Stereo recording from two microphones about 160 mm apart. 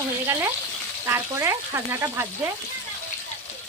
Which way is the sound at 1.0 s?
15° right (ahead or behind).